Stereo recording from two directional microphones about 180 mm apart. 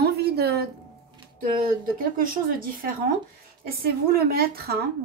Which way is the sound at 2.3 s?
50° right (ahead or behind).